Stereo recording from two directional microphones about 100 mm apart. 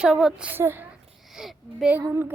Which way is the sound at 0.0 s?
5° right (ahead or behind).